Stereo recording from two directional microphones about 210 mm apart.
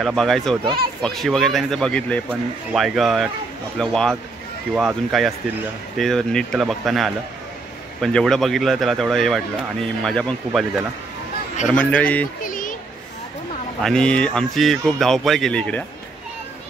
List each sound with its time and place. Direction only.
0.0 s a man's voice: centre (ahead or behind)
12.4 s children playing: 40° left (ahead or behind)
13.8 s speech: 5° left (ahead or behind)